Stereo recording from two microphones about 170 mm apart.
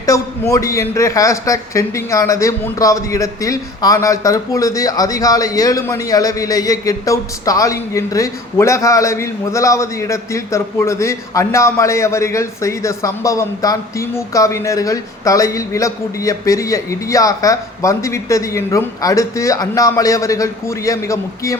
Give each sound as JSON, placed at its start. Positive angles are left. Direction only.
{"t": 0.0, "sound": "a man's voice", "side_deg": 20}